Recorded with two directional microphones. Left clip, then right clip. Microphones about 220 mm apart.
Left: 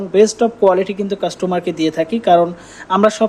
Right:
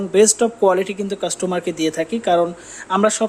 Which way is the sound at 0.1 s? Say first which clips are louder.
Left 2 dB; 5° right (ahead or behind).